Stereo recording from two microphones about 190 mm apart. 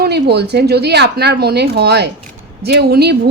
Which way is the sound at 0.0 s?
60° right (ahead or behind).